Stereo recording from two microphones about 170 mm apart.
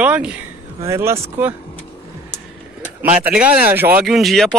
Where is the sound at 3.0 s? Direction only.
10° right (ahead or behind).